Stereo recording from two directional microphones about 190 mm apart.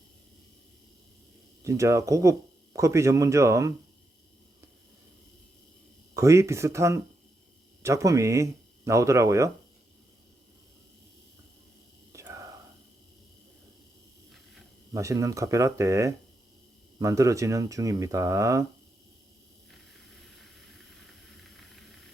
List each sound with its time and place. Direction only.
1.6 s speech: 15° right (ahead or behind)
6.1 s speech: 15° right (ahead or behind)
12.1 s whispering: 15° right (ahead or behind)
14.9 s speech: 15° right (ahead or behind)
20.3 s steam: centre (ahead or behind)